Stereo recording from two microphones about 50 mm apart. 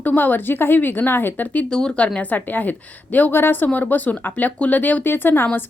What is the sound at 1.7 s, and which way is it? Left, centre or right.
A woman's voice, centre.